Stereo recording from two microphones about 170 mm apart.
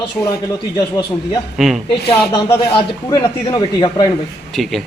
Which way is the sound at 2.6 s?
30° left (ahead or behind).